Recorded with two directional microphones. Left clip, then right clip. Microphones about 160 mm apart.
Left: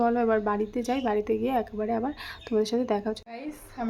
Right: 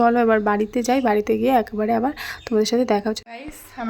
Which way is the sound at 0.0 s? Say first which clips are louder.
Right 7 dB; 30° right (ahead or behind).